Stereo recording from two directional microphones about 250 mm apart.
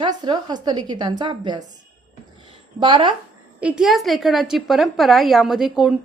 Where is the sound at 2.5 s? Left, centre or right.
Centre.